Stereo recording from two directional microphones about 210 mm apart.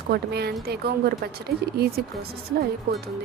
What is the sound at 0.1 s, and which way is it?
A woman's voice, 50° right (ahead or behind).